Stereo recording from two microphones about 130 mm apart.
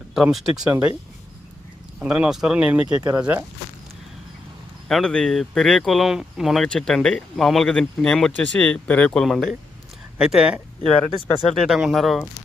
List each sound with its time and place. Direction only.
0.1 s speech: centre (ahead or behind)
2.0 s speech: 10° right (ahead or behind)
2.9 s speech: 30° right (ahead or behind)
3.2 s speech: 10° right (ahead or behind)
4.9 s speech: 5° left (ahead or behind)